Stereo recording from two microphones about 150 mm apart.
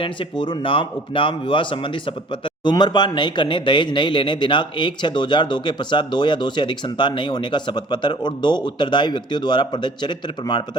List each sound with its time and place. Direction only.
0.0 s speech: 35° left (ahead or behind)